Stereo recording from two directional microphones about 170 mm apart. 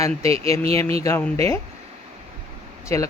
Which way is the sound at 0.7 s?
35° right (ahead or behind).